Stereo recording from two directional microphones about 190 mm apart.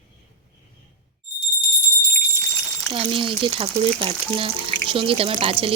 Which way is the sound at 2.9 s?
25° right (ahead or behind).